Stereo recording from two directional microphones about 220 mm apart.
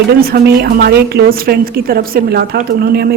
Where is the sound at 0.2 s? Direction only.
45° right (ahead or behind).